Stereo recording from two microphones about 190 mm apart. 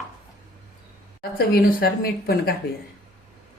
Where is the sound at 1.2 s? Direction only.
50° left (ahead or behind).